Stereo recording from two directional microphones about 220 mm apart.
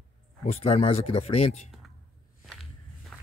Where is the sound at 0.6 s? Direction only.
25° left (ahead or behind).